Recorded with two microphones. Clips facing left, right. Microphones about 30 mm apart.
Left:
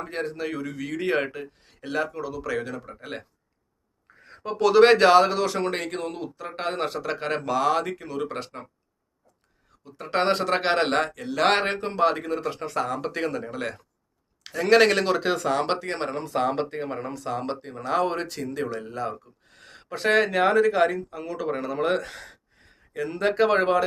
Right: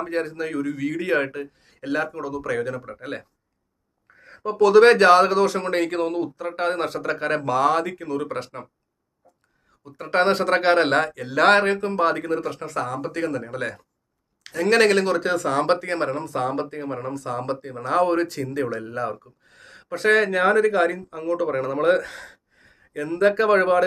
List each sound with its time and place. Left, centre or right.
0.0 s speech: centre
4.5 s speech: centre
5.8 s speech: centre
6.1 s speech: centre
9.8 s speech: centre
11.6 s speech: centre
12.5 s speech: centre
13.4 s speech: centre
15.4 s speech: centre
16.2 s speech: centre